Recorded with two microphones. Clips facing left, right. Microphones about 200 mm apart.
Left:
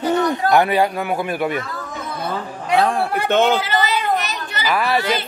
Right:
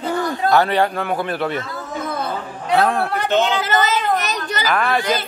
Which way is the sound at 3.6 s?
45° right (ahead or behind).